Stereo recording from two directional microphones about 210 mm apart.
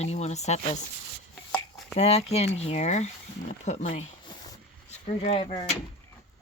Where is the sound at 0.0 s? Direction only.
30° left (ahead or behind).